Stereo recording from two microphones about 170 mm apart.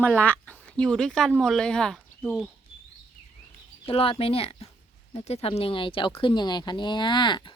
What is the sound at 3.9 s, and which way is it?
Speech, 35° left (ahead or behind).